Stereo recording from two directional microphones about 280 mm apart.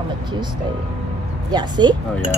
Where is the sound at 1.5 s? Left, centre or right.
Centre.